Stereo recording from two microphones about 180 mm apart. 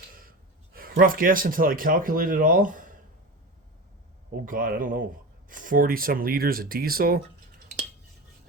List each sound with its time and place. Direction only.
0.1 s speech: 55° right (ahead or behind)
4.4 s speech: 50° right (ahead or behind)